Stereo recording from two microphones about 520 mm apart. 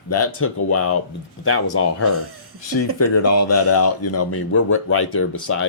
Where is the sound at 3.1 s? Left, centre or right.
Left.